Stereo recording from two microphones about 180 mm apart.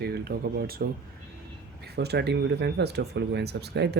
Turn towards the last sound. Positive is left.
turn(degrees=-65)  # may be behind; listen again after turning